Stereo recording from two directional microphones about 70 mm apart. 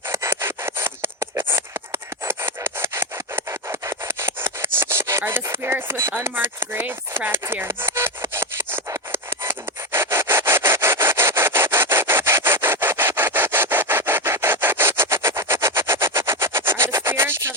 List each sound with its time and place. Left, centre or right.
0.1 s scratch: right
5.2 s a sound: right
7.4 s sawing: right
9.1 s rub: right